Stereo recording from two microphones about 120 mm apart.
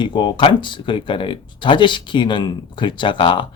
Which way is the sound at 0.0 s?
40° left (ahead or behind).